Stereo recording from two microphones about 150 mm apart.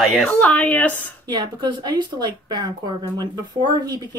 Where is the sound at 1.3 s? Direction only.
30° right (ahead or behind).